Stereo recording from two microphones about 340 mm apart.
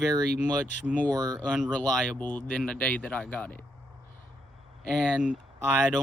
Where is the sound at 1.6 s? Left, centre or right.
Centre.